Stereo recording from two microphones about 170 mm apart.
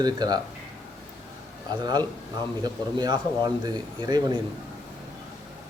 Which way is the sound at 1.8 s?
25° right (ahead or behind).